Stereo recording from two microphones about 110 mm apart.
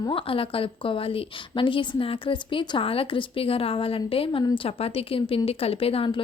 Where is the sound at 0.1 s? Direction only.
55° left (ahead or behind).